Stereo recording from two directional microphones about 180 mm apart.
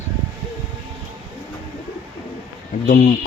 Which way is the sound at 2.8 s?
45° left (ahead or behind).